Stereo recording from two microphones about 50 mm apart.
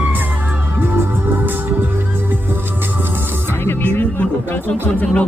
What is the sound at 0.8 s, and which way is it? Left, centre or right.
Music, right.